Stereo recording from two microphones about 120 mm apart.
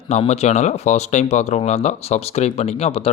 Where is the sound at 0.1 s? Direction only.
65° left (ahead or behind).